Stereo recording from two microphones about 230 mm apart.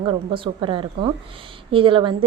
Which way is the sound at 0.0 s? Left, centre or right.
Right.